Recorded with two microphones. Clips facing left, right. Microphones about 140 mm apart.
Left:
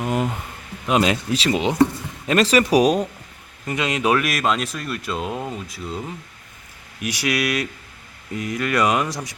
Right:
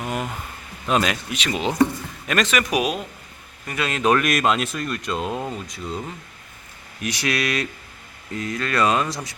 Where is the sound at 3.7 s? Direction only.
20° left (ahead or behind); by 5.8 s centre (ahead or behind).